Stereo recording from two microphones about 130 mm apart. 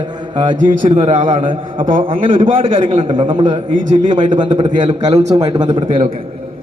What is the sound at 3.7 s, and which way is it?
Speech, 80° right.